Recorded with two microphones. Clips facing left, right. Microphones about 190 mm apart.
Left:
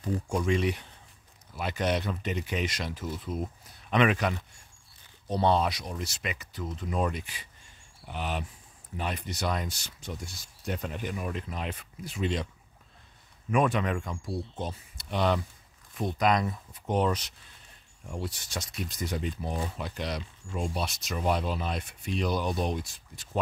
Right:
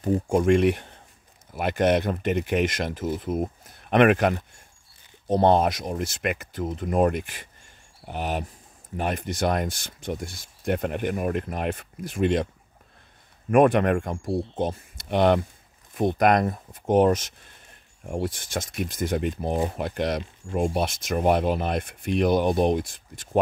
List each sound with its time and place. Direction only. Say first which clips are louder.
0.3 s speech: right 8 dB; 55° right (ahead or behind)
13.5 s speech: right 8 dB; 55° right (ahead or behind)